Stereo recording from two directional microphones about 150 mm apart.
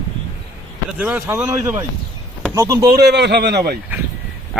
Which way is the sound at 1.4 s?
25° right (ahead or behind).